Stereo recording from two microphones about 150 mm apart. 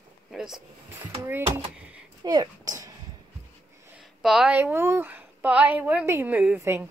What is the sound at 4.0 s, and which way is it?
A woman's voice, centre (ahead or behind).